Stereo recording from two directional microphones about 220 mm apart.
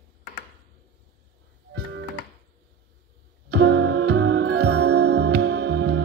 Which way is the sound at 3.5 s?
50° right (ahead or behind).